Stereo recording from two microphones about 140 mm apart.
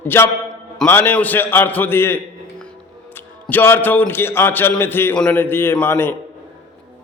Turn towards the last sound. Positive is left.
turn(degrees=15)  # may be behind; listen again after turning